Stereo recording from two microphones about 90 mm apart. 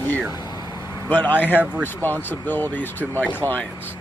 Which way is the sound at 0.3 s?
50° left (ahead or behind).